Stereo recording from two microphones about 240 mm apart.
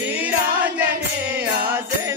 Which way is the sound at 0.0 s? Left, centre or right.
Centre.